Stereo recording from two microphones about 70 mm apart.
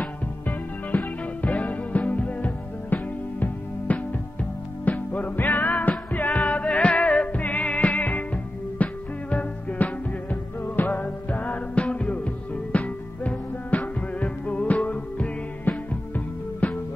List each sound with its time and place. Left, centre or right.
0.0 s music: left